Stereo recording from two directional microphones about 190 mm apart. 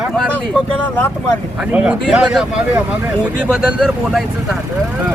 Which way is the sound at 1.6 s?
5° right (ahead or behind).